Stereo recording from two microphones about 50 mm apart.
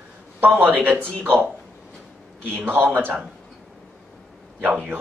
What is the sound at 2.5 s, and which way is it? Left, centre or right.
Speech, right.